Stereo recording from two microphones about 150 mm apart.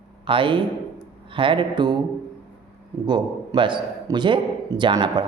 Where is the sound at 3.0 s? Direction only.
30° right (ahead or behind).